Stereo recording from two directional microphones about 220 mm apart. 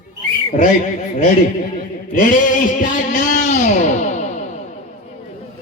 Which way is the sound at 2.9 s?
35° left (ahead or behind).